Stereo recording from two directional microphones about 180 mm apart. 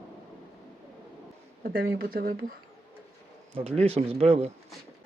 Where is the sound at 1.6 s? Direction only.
55° right (ahead or behind).